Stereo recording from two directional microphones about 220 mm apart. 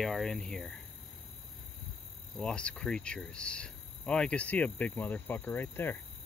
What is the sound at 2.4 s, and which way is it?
Speech, 5° left (ahead or behind).